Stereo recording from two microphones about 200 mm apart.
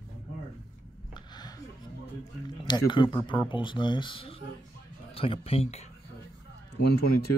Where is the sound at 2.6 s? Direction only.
20° left (ahead or behind).